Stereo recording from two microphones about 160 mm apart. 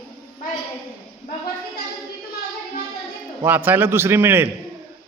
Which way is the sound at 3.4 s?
10° right (ahead or behind).